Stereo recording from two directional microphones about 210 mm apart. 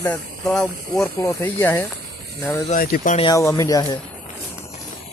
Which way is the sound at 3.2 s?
15° left (ahead or behind).